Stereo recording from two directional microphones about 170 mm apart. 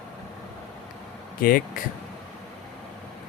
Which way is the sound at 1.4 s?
60° left (ahead or behind).